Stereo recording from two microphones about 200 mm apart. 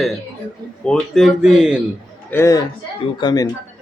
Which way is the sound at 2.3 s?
15° left (ahead or behind).